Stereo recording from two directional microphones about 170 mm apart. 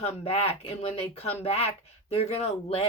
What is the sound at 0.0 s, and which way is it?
Speech, 35° left (ahead or behind).